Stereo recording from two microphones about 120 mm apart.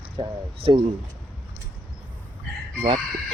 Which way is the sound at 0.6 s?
50° right (ahead or behind).